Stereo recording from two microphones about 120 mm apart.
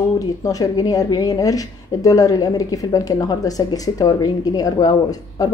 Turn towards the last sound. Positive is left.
turn(degrees=30)  # may be behind; listen again after turning